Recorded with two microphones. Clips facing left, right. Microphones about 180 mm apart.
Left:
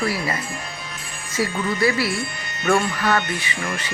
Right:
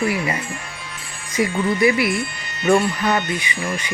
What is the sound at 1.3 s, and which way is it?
Speech, 20° right (ahead or behind).